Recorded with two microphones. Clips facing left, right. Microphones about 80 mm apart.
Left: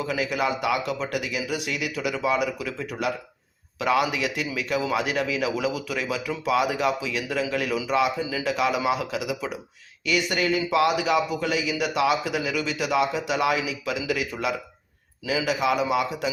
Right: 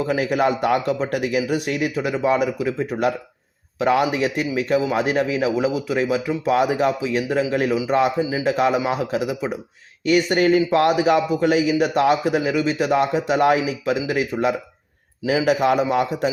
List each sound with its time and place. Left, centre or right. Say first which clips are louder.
0.0 s a man's voice: right 6 dB; right
8.2 s a man's voice: right 6 dB; right
8.4 s a man's voice: right 3 dB; right